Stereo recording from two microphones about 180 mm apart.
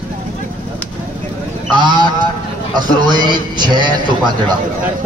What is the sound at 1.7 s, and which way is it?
Honk, 25° right (ahead or behind).